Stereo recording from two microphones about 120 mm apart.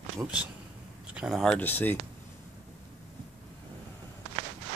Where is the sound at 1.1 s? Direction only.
5° right (ahead or behind).